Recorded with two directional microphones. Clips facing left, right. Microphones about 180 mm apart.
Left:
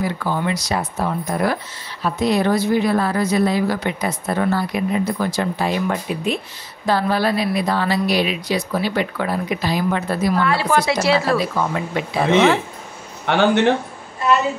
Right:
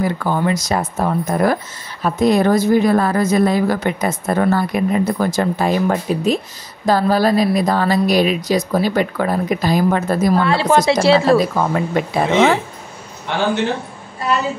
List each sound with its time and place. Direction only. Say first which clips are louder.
0.0 s a woman's voice: right 4 dB; 50° right (ahead or behind)
10.4 s speech: right 4 dB; 25° right (ahead or behind)
11.3 s a woman's voice: right 5 dB; 45° right (ahead or behind)